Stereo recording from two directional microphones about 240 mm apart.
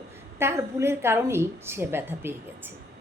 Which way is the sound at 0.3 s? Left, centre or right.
Centre.